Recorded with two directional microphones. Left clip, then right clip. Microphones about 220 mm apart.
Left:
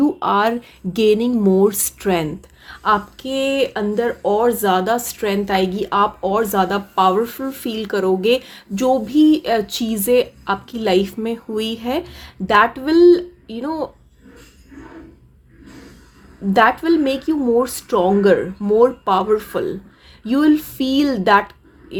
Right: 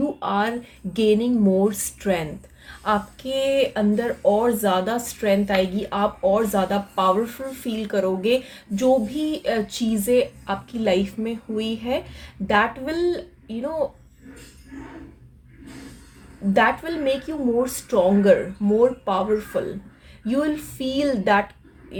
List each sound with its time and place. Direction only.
0.2 s speech: 45° left (ahead or behind)
16.5 s speech: 40° left (ahead or behind)